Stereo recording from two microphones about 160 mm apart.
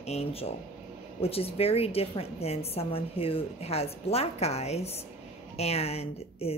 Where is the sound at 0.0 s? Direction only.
40° left (ahead or behind).